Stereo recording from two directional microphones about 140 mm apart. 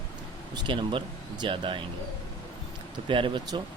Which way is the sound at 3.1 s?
35° right (ahead or behind).